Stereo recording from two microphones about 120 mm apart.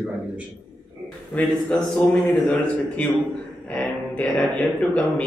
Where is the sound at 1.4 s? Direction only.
5° left (ahead or behind).